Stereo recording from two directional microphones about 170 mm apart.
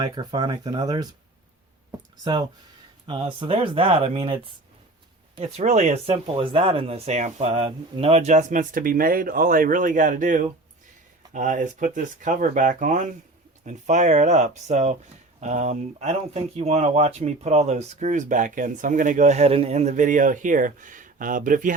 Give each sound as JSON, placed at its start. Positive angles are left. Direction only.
{"t": 0.0, "sound": "speech", "side_deg": -25}
{"t": 2.2, "sound": "speech", "side_deg": -25}
{"t": 5.4, "sound": "speech", "side_deg": -40}